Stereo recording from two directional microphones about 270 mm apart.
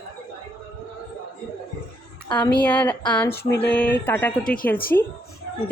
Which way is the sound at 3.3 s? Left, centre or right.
Left.